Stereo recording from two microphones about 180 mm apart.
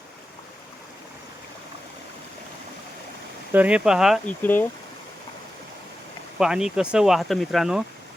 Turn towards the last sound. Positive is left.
turn(degrees=0)  # may be behind; listen again after turning